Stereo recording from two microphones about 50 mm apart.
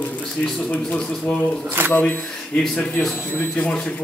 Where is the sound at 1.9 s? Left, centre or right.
Left.